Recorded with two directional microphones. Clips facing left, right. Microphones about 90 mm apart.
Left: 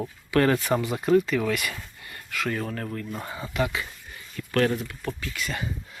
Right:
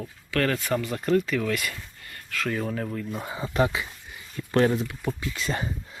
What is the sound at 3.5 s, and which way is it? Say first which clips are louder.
Speech: right 3 dB; 35° right (ahead or behind).